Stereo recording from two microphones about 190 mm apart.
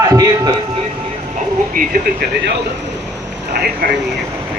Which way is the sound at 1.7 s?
50° right (ahead or behind).